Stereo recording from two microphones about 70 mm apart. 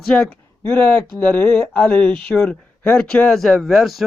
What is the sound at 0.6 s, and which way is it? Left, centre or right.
Speech, left.